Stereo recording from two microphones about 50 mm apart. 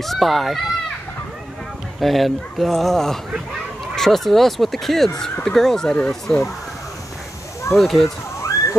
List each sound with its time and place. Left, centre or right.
0.0 s speech: centre
2.0 s speech: centre
7.7 s speech: centre
8.4 s a sound: left